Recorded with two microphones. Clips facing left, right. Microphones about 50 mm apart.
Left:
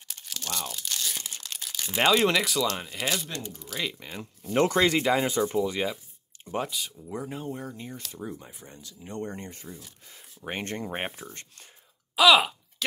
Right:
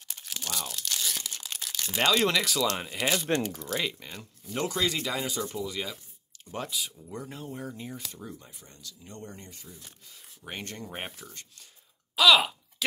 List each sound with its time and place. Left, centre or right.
0.1 s tearing: centre
1.4 s a sound: centre
2.1 s speech: centre
2.8 s speech: centre
3.4 s speech: right
3.8 s speech: centre
4.5 s speech: left
6.4 s speech: centre
7.4 s speech: centre
8.2 s speech: centre
12.2 s a sound: centre